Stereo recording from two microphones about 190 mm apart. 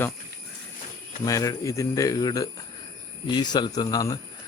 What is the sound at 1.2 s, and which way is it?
Speech, 15° left (ahead or behind).